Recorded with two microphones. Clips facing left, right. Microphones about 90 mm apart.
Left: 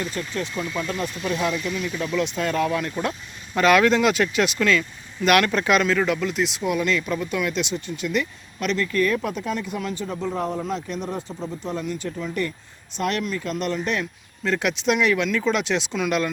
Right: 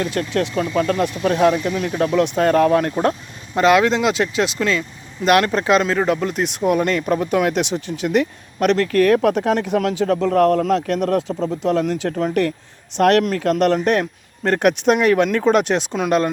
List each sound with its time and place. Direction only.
0.0 s speech: 65° right (ahead or behind); by 3.2 s 45° right (ahead or behind)
3.5 s speech: 25° right (ahead or behind)